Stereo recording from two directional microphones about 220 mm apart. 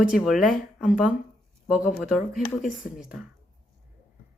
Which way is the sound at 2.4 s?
35° left (ahead or behind).